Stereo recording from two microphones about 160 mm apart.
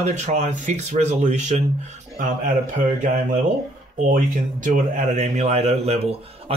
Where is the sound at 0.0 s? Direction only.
45° right (ahead or behind).